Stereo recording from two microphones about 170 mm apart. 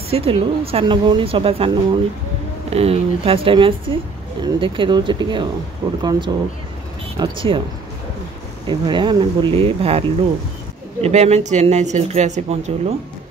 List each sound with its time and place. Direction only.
0.1 s a woman's voice: 35° right (ahead or behind)
8.6 s a woman's voice: 25° right (ahead or behind)